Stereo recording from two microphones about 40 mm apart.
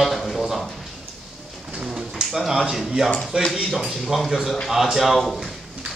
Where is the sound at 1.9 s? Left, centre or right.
Centre.